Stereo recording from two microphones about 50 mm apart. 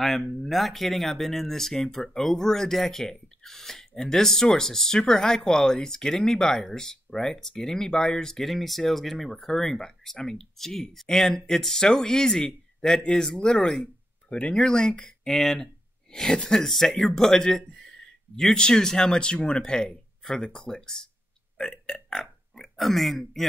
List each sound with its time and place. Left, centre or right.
0.0 s speech: centre
21.5 s burping: centre